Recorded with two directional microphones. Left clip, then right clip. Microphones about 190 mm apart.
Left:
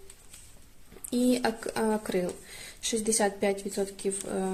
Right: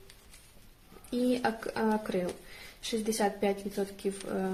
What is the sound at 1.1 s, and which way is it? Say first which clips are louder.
Speech: left 3 dB; 35° left (ahead or behind).